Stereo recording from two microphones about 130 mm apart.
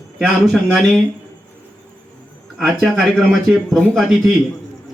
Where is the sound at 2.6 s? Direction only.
Centre (ahead or behind).